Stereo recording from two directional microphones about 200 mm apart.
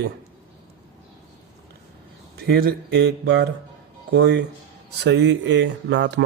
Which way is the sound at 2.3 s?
50° right (ahead or behind).